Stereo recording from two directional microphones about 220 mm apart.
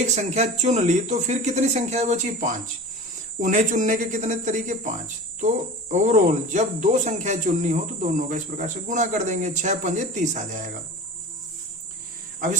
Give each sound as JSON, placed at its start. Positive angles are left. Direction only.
{"t": 0.0, "sound": "speech", "side_deg": -30}